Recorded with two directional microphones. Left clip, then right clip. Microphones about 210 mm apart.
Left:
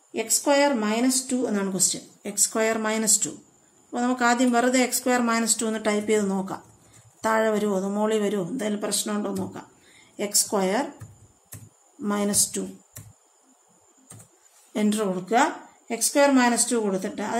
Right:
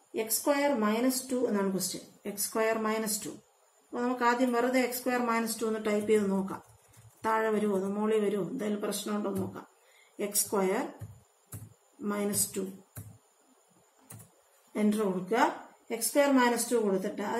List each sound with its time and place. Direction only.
0.1 s speech: 55° left (ahead or behind)
12.0 s speech: 55° left (ahead or behind)
14.7 s speech: 50° left (ahead or behind)